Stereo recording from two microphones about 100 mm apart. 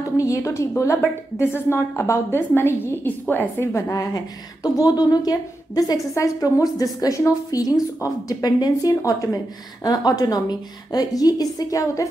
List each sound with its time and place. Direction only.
0.2 s a woman's voice: 30° left (ahead or behind)
3.9 s a woman's voice: 35° left (ahead or behind)